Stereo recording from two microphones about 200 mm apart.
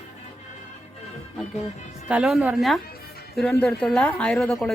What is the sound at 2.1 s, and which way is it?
A woman's voice, centre (ahead or behind).